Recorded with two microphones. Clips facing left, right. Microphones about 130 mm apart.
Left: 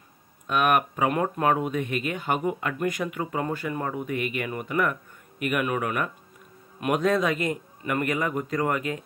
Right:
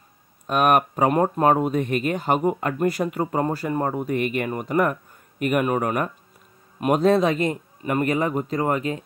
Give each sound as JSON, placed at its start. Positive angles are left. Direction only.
{"t": 0.5, "sound": "speech", "side_deg": -40}